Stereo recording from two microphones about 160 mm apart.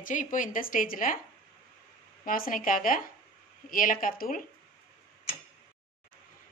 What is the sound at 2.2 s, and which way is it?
A woman's voice, 60° left (ahead or behind).